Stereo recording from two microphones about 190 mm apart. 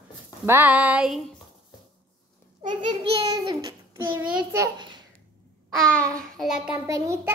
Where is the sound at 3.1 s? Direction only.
25° right (ahead or behind).